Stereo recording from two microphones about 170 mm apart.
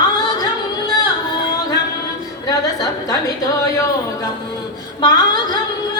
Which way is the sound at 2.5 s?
20° left (ahead or behind).